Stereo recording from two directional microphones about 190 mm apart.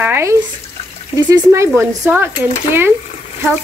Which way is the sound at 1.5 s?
15° right (ahead or behind).